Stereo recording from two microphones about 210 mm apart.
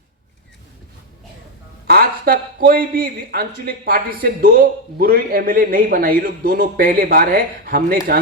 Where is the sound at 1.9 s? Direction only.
45° right (ahead or behind).